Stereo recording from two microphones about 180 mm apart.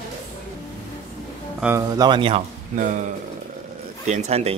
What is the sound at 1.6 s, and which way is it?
Speech, 10° right (ahead or behind).